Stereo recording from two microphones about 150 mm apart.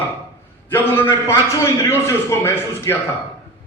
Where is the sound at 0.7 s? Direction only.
15° left (ahead or behind).